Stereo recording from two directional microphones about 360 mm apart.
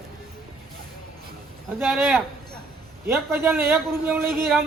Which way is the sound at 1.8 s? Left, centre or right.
Centre.